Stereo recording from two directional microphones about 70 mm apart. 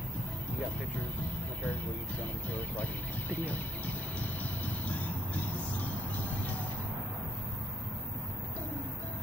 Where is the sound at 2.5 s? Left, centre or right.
Left.